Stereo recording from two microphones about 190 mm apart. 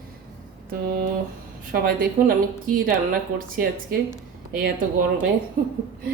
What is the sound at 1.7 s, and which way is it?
A woman's voice, 50° right (ahead or behind).